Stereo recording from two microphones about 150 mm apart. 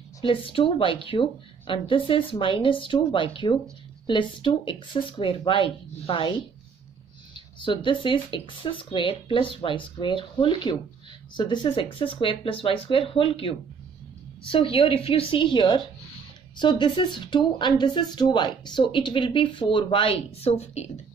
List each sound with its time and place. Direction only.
0.2 s speech: 35° left (ahead or behind)
7.3 s speech: 35° left (ahead or behind)